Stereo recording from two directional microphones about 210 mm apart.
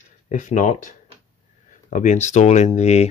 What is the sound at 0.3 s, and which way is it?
Speech, 35° left (ahead or behind).